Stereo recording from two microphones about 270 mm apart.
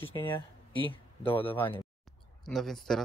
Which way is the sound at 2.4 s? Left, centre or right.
Centre.